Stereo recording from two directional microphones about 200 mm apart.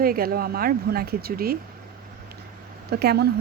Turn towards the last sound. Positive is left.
turn(degrees=-55)  # may be behind; listen again after turning